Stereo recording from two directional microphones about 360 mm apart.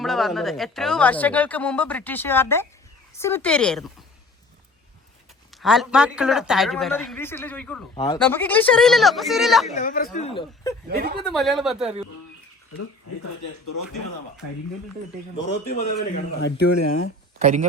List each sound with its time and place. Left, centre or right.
0.0 s speech: centre
5.6 s speech: centre
9.7 s speech: left
10.8 s a woman's voice: right
11.2 s speech: centre
12.7 s speech: left
16.4 s speech: left
16.7 s speech: left
17.4 s a woman's voice: centre